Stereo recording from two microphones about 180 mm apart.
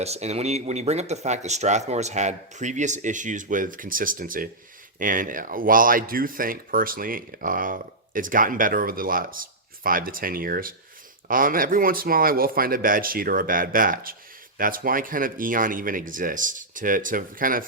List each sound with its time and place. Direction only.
0.0 s speech: 35° right (ahead or behind)